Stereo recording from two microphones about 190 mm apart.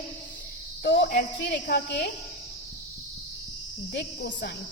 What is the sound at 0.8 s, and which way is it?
Speech, 65° left (ahead or behind).